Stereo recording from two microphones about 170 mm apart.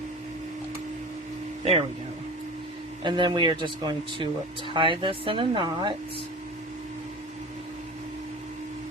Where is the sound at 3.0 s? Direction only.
25° right (ahead or behind).